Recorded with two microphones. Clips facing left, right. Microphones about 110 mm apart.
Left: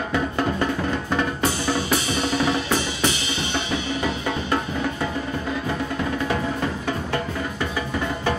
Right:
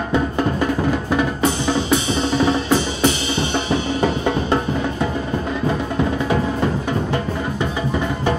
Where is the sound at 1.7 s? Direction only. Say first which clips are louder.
Right 4 dB; 20° right (ahead or behind).